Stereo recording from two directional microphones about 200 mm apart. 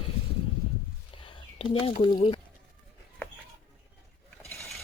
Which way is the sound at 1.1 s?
25° left (ahead or behind).